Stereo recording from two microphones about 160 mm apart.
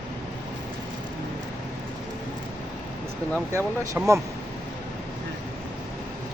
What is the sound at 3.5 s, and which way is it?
Speech, 15° right (ahead or behind).